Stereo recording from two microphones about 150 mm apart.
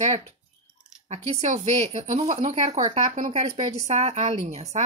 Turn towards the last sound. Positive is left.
turn(degrees=-45)  # may be behind; listen again after turning